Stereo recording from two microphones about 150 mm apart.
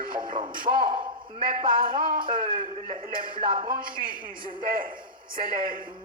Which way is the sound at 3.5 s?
35° right (ahead or behind).